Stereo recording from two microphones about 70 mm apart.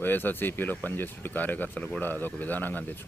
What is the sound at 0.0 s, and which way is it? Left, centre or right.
Speech, left.